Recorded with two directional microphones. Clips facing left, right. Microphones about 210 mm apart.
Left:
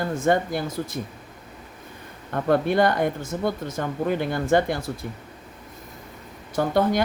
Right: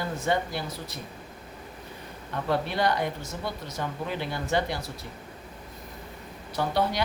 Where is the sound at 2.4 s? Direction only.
50° left (ahead or behind).